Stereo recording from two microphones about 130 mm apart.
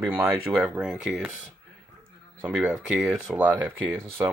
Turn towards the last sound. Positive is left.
turn(degrees=-15)  # may be behind; listen again after turning